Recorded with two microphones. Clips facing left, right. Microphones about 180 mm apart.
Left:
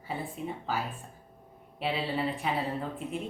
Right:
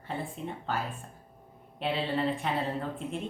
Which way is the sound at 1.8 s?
5° left (ahead or behind).